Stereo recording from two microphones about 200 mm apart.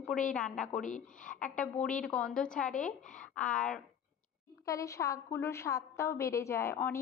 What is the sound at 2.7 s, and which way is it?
Speech, 40° left (ahead or behind).